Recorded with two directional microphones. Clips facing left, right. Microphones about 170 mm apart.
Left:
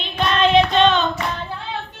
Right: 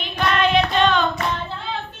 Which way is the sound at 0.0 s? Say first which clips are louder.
Left 2 dB; 20° left (ahead or behind).